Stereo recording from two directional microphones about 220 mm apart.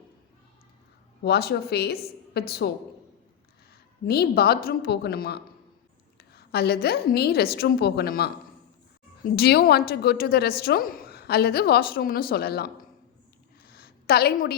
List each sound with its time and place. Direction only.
1.2 s a woman's voice: 45° left (ahead or behind)
4.0 s a woman's voice: 45° left (ahead or behind)
13.7 s a sound: 45° left (ahead or behind)